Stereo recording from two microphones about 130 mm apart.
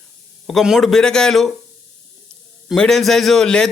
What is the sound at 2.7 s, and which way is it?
A man's voice, 5° left (ahead or behind).